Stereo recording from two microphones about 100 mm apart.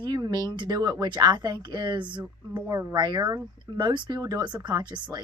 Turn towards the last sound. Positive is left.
turn(degrees=-45)  # may be behind; listen again after turning